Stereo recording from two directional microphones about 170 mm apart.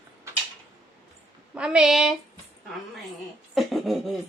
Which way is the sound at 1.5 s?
5° right (ahead or behind).